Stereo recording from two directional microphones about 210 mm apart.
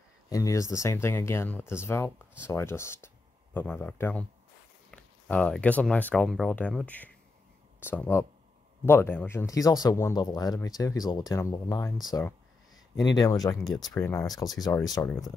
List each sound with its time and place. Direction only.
0.3 s speech: 15° left (ahead or behind)